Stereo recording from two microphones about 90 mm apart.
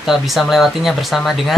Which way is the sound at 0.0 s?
Centre (ahead or behind).